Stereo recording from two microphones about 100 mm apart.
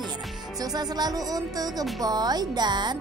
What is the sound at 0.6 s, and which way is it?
Music, 40° right (ahead or behind).